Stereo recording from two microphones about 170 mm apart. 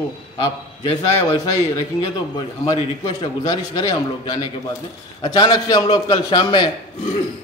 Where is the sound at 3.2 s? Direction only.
25° left (ahead or behind).